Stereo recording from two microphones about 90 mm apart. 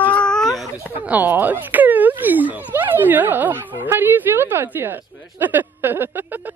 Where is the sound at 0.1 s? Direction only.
10° left (ahead or behind).